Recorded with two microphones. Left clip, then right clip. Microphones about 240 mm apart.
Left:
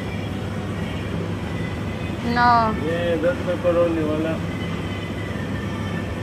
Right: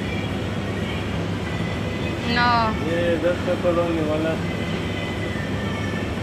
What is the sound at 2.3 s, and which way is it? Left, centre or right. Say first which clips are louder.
Speech: left 3 dB; left.